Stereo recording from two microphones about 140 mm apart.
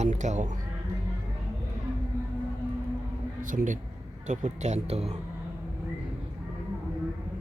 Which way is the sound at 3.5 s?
65° right (ahead or behind).